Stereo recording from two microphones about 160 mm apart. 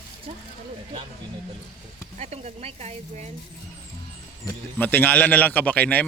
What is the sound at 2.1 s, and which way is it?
Speech, 45° right (ahead or behind).